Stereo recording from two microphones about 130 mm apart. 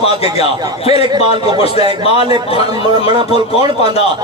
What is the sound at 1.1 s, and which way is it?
Speech, 35° right (ahead or behind).